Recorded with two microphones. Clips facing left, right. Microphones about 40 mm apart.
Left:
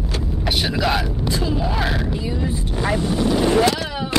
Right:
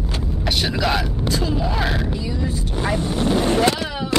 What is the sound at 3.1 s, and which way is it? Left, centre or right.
Speech, right.